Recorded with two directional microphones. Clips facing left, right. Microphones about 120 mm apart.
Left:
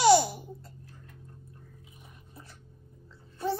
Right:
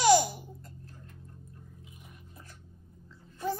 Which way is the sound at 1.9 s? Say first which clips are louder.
Even; 30° left (ahead or behind).